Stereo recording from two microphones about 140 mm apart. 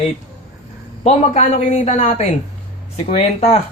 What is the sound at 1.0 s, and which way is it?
Speech, 50° left (ahead or behind).